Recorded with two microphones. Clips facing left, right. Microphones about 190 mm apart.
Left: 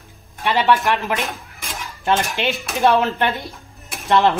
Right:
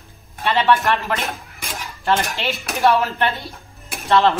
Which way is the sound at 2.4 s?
15° left (ahead or behind).